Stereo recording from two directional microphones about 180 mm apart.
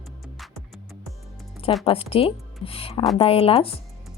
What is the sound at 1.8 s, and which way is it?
Speech, 30° left (ahead or behind).